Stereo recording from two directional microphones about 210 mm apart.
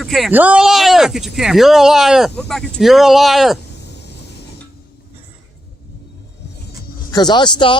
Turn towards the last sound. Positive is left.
turn(degrees=20)  # may be behind; listen again after turning